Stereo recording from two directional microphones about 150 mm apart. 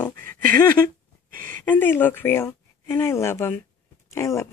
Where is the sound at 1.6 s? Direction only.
15° left (ahead or behind).